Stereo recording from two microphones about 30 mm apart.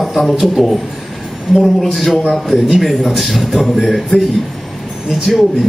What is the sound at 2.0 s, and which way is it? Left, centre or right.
Speech, centre.